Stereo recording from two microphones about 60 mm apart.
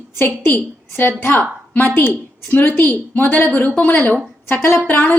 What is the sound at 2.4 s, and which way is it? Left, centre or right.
A woman's voice, left.